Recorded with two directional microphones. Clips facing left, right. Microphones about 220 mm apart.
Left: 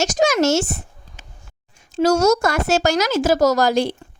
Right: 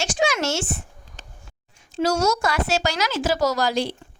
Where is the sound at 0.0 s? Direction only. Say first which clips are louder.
Left 6 dB; 40° left (ahead or behind).